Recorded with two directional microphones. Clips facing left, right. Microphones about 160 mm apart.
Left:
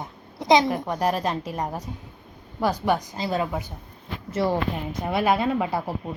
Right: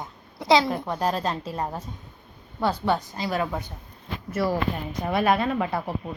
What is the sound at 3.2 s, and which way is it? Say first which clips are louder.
A woman's voice: left 1 dB; 25° left (ahead or behind).